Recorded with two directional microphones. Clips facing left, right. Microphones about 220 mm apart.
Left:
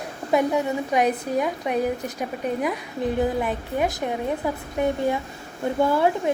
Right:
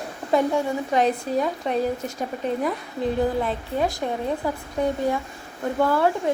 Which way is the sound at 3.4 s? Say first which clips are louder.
Even; 15° left (ahead or behind).